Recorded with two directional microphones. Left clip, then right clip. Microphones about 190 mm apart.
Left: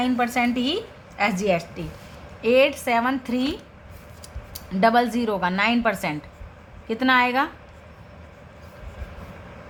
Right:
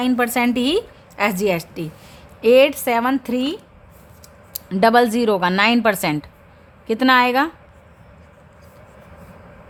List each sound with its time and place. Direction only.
0.0 s a woman's voice: 60° right (ahead or behind)
2.4 s a woman's voice: 50° right (ahead or behind)
4.5 s a woman's voice: 45° right (ahead or behind)